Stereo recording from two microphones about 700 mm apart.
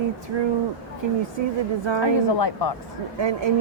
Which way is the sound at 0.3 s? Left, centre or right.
Right.